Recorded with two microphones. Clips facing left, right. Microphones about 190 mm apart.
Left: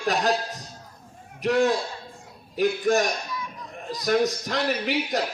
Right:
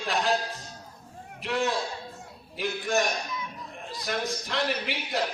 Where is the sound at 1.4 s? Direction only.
45° left (ahead or behind).